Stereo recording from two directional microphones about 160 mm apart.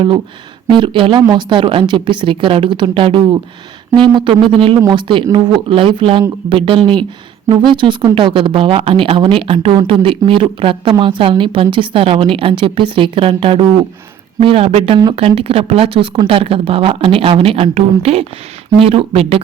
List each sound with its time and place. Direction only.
0.7 s speech: 30° right (ahead or behind)